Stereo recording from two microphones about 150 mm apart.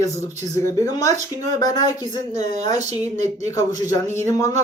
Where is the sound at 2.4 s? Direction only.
50° right (ahead or behind).